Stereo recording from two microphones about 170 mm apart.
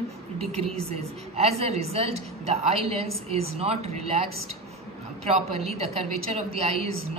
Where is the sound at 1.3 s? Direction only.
35° right (ahead or behind).